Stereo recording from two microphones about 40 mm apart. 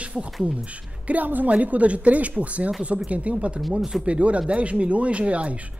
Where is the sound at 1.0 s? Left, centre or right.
Right.